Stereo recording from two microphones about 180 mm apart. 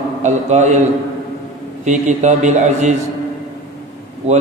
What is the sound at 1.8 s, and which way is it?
A man's voice, 40° right (ahead or behind).